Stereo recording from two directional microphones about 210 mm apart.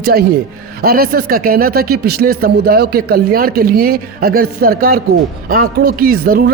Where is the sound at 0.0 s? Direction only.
50° right (ahead or behind).